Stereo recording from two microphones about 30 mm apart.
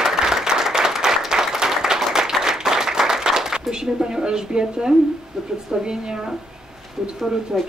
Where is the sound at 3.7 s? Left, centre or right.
Right.